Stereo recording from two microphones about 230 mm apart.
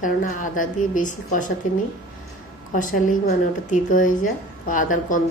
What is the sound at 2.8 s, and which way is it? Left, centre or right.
A woman's voice, left.